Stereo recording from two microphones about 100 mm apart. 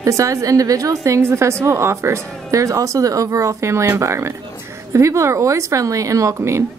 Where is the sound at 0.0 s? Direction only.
30° right (ahead or behind).